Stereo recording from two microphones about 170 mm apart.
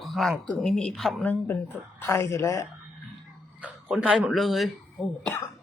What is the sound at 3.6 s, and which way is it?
Speech, 5° right (ahead or behind).